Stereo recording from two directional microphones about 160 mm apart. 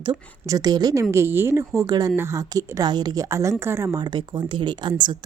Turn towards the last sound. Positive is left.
turn(degrees=-25)  # may be behind; listen again after turning